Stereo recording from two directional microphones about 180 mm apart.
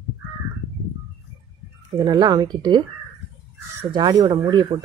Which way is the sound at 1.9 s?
25° right (ahead or behind).